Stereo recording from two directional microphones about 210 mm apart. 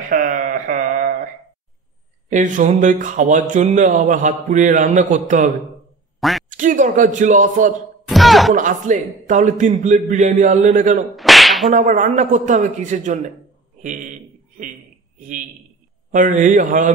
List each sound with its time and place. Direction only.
0.1 s a sound: 40° right (ahead or behind)
2.2 s speech: 35° right (ahead or behind)
8.1 s speech: centre (ahead or behind)
8.5 s speech: 35° right (ahead or behind)
11.1 s whip: centre (ahead or behind)
11.7 s speech: 35° right (ahead or behind)
15.1 s a man's voice: 40° right (ahead or behind)